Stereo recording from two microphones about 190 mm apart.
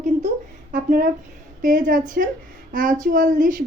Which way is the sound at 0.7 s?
45° right (ahead or behind).